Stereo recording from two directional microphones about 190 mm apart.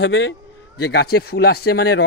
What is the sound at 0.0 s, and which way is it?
A man's voice, 70° left (ahead or behind).